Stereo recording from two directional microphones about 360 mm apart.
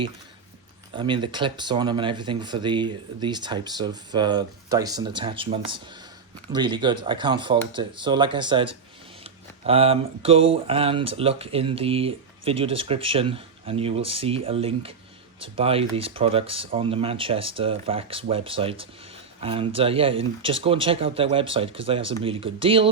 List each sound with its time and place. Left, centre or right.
0.9 s speech: centre